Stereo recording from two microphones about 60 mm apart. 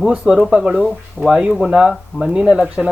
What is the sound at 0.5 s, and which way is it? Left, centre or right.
Speech, centre.